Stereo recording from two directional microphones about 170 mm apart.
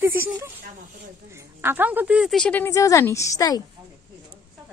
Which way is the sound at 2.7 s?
20° left (ahead or behind).